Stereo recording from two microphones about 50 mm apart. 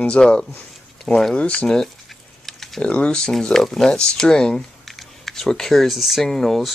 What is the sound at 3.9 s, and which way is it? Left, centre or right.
Speech, centre.